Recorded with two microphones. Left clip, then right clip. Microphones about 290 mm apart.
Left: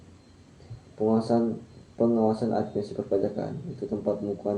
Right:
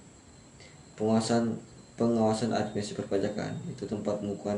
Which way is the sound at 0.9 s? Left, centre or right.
Right.